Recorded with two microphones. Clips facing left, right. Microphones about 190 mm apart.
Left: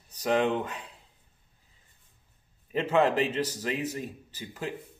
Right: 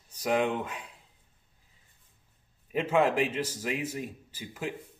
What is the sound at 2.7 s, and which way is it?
A man's voice, 10° right (ahead or behind).